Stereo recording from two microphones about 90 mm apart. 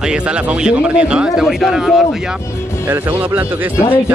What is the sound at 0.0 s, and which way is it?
Speech, 10° right (ahead or behind).